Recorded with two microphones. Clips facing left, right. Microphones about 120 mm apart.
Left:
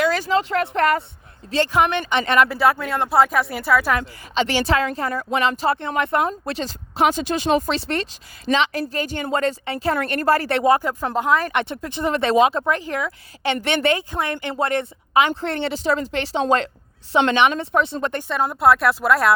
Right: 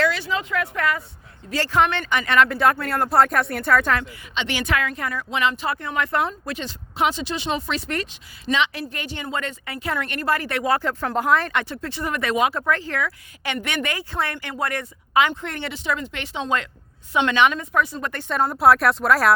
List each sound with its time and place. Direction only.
0.1 s speech: 40° left (ahead or behind); by 2.4 s 25° left (ahead or behind)
2.4 s speech: 5° left (ahead or behind)
4.0 s speech: 35° left (ahead or behind)
6.4 s speech: 35° left (ahead or behind)
7.8 s speech: 30° left (ahead or behind)
10.7 s speech: 15° left (ahead or behind)
11.1 s speech: centre (ahead or behind)
11.4 s speech: 20° left (ahead or behind)
14.1 s speech: 15° left (ahead or behind)
14.3 s speech: 30° left (ahead or behind)
18.3 s speech: centre (ahead or behind)